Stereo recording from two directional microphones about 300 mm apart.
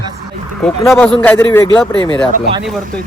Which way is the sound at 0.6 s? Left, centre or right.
Centre.